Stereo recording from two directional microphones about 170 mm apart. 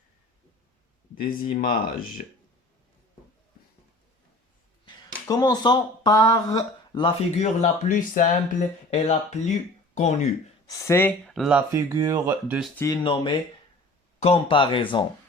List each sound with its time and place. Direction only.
1.2 s speech: 50° left (ahead or behind)
5.3 s speech: 20° left (ahead or behind)
7.3 s speech: 40° left (ahead or behind)
10.7 s speech: 15° left (ahead or behind)
11.3 s speech: centre (ahead or behind)
11.5 s speech: 20° right (ahead or behind)
12.7 s speech: 20° left (ahead or behind)
13.0 s speech: 30° left (ahead or behind)